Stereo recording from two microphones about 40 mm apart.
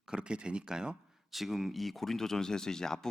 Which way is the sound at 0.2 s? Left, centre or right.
Right.